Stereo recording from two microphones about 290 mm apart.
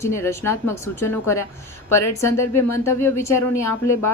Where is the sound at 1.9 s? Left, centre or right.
Left.